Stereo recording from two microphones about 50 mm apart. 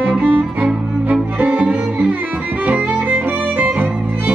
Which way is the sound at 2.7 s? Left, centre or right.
Right.